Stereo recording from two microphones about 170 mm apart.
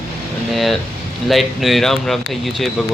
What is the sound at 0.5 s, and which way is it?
A man's voice, centre (ahead or behind).